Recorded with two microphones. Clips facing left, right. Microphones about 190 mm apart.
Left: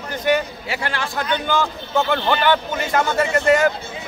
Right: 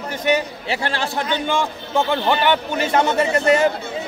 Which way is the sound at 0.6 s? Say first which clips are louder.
Right 2 dB; 30° right (ahead or behind).